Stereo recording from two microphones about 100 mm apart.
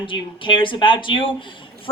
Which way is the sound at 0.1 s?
55° left (ahead or behind).